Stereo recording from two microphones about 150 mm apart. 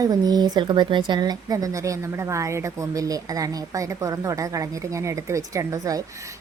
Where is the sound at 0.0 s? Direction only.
25° right (ahead or behind).